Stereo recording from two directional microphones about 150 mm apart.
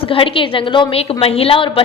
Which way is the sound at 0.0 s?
35° left (ahead or behind).